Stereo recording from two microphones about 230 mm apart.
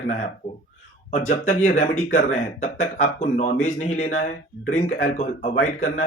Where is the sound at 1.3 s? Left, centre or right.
Left.